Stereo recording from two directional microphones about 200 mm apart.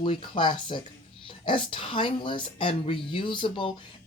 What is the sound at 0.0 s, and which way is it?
Speech, 25° left (ahead or behind).